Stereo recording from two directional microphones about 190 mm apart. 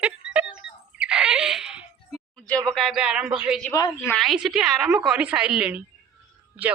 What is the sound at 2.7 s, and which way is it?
Speech, centre (ahead or behind).